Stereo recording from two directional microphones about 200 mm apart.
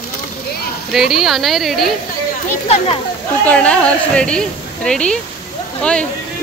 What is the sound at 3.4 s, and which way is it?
Speech, 5° left (ahead or behind).